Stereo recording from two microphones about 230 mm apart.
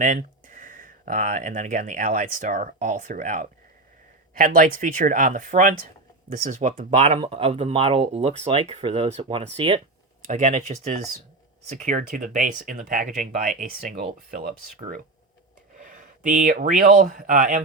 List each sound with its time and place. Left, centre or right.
0.0 s speech: right
15.8 s speech: right